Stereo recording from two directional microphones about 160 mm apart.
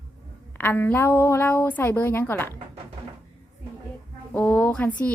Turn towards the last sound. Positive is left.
turn(degrees=10)  # may be behind; listen again after turning